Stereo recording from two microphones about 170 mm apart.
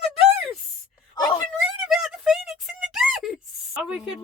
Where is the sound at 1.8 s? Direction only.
5° right (ahead or behind).